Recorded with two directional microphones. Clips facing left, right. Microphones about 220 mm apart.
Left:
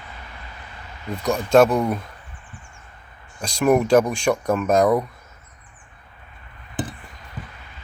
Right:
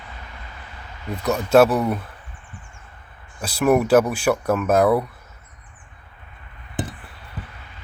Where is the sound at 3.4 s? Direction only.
5° right (ahead or behind).